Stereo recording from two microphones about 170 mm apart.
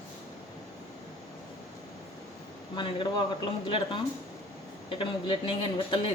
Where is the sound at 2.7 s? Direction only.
30° left (ahead or behind).